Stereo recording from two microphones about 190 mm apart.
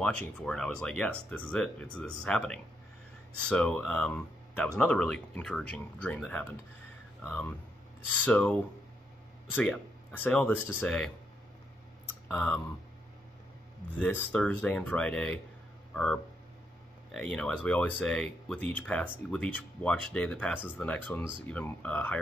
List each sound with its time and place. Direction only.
0.0 s speech: 5° left (ahead or behind)
9.6 s speech: 10° left (ahead or behind)
12.3 s speech: 5° left (ahead or behind)
14.0 s speech: 5° left (ahead or behind)
20.7 s speech: 10° left (ahead or behind)